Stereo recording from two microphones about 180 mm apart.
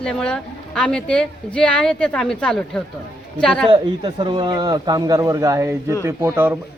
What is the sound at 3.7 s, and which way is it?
A man's voice, 25° right (ahead or behind).